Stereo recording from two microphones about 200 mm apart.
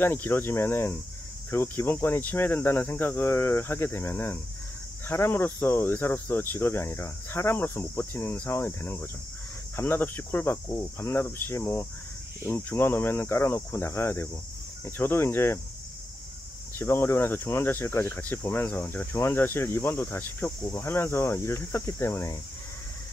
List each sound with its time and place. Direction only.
0.0 s speech: 10° left (ahead or behind)
16.7 s speech: 10° left (ahead or behind)